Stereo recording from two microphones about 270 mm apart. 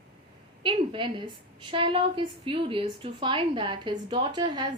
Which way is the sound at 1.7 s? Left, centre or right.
Centre.